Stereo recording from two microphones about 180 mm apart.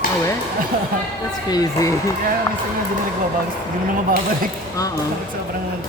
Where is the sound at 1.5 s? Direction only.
20° left (ahead or behind).